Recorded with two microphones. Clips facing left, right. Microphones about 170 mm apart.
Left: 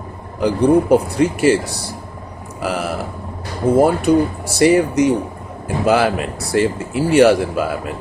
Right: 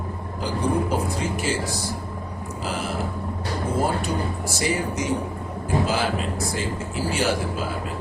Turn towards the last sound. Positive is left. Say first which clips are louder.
# left 12 dB
turn(degrees=65)  # may be behind; listen again after turning